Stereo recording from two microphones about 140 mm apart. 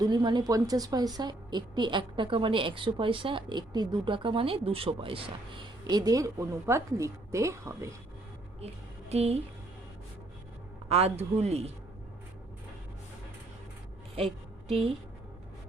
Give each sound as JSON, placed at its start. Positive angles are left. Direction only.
{"t": 0.0, "sound": "a woman's voice", "side_deg": -30}
{"t": 8.6, "sound": "a woman's voice", "side_deg": -50}
{"t": 10.8, "sound": "a man's voice", "side_deg": -50}